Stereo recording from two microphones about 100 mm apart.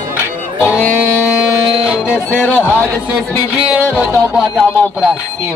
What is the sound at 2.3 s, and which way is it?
Speech, 20° left (ahead or behind).